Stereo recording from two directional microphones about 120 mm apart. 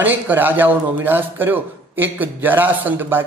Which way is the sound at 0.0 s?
15° right (ahead or behind).